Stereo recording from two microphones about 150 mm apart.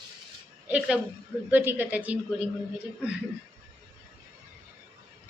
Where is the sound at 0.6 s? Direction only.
10° right (ahead or behind).